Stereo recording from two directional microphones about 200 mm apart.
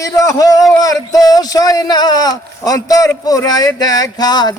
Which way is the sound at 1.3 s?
20° left (ahead or behind).